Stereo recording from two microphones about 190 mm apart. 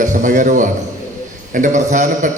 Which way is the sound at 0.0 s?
40° right (ahead or behind).